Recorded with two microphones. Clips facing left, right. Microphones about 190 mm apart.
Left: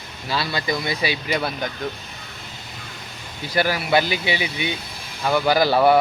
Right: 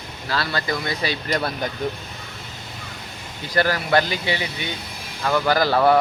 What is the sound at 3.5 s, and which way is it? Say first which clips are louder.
Speech: even; 10° left (ahead or behind).